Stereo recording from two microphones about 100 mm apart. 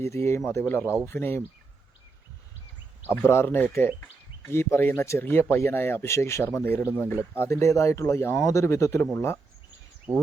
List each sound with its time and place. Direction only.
0.0 s speech: 25° left (ahead or behind)
3.1 s speech: 25° left (ahead or behind)